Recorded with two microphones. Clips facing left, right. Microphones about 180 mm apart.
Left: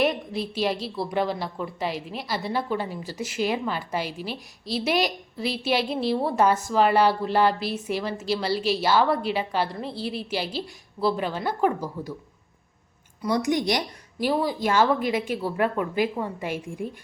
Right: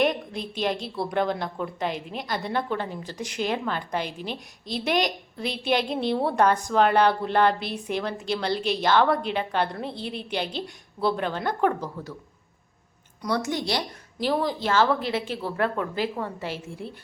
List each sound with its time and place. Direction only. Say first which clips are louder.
0.0 s a woman's voice: even; 5° left (ahead or behind)
13.2 s a woman's voice: left 3 dB; 15° left (ahead or behind)